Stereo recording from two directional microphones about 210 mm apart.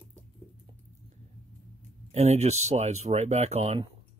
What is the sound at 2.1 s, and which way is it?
Speech, 30° right (ahead or behind).